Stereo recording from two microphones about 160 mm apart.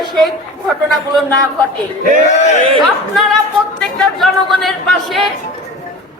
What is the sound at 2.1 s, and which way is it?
Speech, 45° left (ahead or behind).